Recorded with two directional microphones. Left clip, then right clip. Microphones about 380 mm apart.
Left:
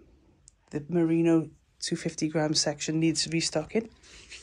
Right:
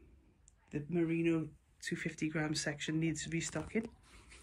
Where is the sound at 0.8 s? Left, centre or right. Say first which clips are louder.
Left 10 dB; centre.